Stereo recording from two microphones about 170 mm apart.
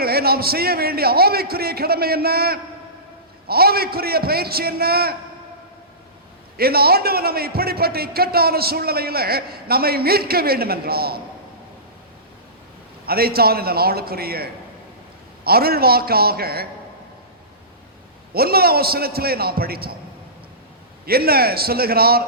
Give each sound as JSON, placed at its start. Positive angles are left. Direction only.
{"t": 0.0, "sound": "a man's voice", "side_deg": -65}
{"t": 6.6, "sound": "a man's voice", "side_deg": -65}
{"t": 13.1, "sound": "a man's voice", "side_deg": -65}
{"t": 18.3, "sound": "a man's voice", "side_deg": -65}
{"t": 21.1, "sound": "a man's voice", "side_deg": -65}